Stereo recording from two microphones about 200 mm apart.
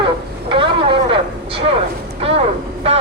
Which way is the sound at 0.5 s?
25° right (ahead or behind).